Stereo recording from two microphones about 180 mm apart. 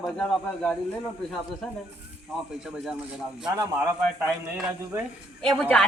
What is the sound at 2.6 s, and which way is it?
Speech, 5° right (ahead or behind).